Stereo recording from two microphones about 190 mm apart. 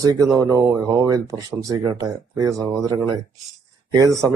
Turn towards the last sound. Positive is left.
turn(degrees=-15)  # may be behind; listen again after turning